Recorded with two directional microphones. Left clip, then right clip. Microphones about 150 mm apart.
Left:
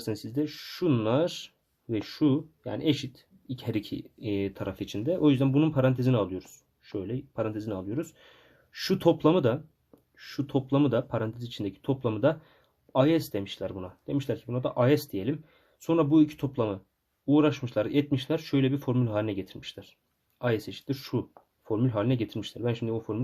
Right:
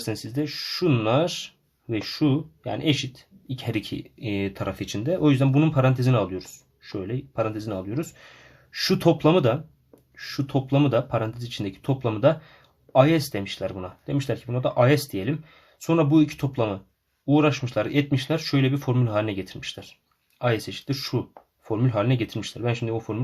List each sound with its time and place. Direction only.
0.0 s speech: 25° left (ahead or behind)